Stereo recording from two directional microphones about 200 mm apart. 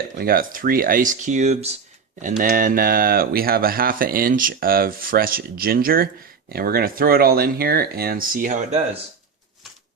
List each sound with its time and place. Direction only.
0.2 s speech: 45° right (ahead or behind)